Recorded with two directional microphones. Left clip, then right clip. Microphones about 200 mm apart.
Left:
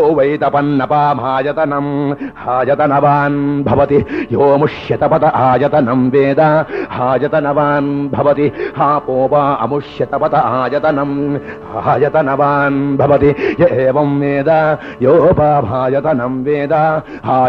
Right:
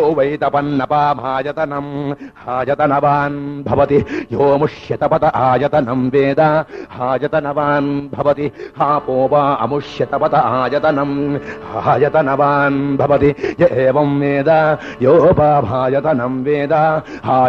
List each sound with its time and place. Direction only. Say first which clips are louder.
0.0 s a man's voice: left 3 dB; 35° right (ahead or behind)